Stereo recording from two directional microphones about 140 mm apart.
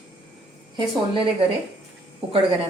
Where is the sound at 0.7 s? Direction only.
40° right (ahead or behind).